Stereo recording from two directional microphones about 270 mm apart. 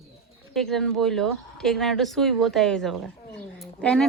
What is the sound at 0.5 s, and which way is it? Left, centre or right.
Speech, centre.